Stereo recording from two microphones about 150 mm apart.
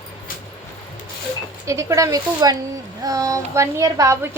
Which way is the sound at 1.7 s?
20° right (ahead or behind).